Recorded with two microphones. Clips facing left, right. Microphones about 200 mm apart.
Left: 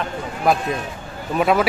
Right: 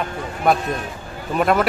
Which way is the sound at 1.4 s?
Centre (ahead or behind).